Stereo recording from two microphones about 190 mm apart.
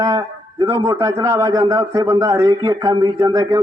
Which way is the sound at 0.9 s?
15° right (ahead or behind).